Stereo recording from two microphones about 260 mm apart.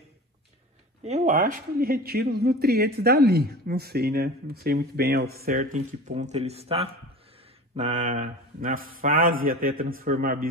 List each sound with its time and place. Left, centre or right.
1.0 s a man's voice: right